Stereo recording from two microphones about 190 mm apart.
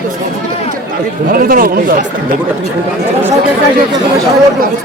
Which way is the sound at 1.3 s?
50° right (ahead or behind).